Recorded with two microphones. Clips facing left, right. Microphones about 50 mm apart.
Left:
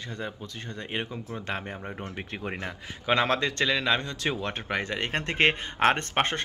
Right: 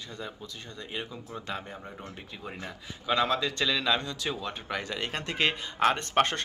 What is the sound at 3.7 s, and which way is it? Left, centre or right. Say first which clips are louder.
Speech: even; left.